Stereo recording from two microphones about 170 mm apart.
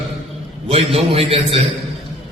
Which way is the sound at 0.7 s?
35° right (ahead or behind).